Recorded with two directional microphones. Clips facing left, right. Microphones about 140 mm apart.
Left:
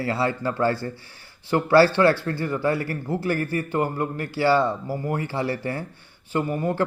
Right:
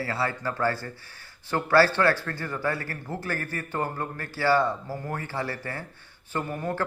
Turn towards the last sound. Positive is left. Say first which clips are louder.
# left 6 dB
turn(degrees=15)  # may be behind; listen again after turning